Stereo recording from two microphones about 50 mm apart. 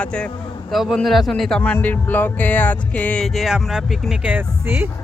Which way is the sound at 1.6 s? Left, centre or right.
Left.